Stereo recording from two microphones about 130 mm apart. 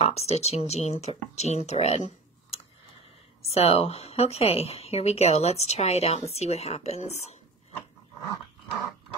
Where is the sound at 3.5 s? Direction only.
55° left (ahead or behind).